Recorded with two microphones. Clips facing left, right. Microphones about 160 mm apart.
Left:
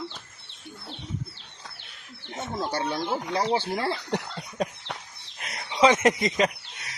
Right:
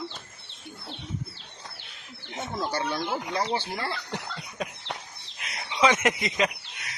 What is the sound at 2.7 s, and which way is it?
Speech, 25° left (ahead or behind).